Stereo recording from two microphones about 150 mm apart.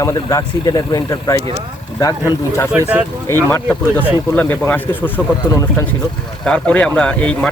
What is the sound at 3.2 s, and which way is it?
Speech, 15° left (ahead or behind).